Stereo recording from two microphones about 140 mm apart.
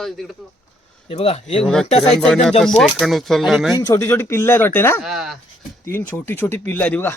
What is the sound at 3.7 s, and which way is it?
Speech, 25° left (ahead or behind).